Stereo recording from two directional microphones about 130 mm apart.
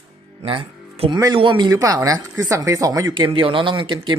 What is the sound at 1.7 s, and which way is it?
Speech, 25° right (ahead or behind).